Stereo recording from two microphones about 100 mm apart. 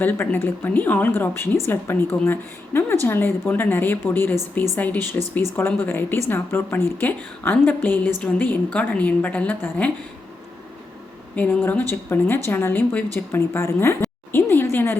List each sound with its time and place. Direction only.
0.0 s a woman's voice: 20° left (ahead or behind)
11.3 s a woman's voice: 15° left (ahead or behind)